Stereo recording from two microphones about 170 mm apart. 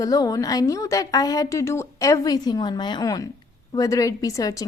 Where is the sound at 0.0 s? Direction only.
20° left (ahead or behind).